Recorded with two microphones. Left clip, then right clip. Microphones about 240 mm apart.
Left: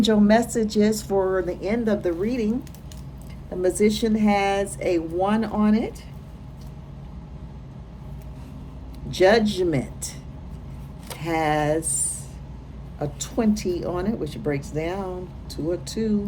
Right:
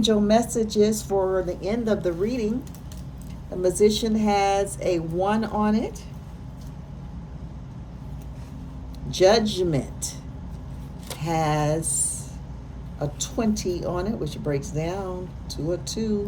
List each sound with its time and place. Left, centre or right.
0.0 s a woman's voice: left
3.6 s speech: left
9.0 s speech: left
11.1 s a sound: left
13.0 s speech: left